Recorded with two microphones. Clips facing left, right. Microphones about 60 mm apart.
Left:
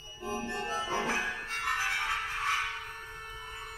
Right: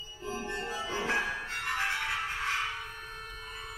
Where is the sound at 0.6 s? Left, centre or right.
Left.